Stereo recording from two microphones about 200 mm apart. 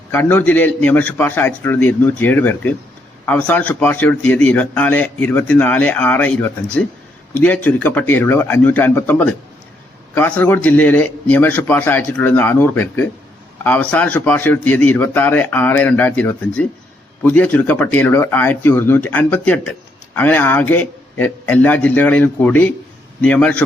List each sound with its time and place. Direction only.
0.1 s a man's voice: 10° left (ahead or behind)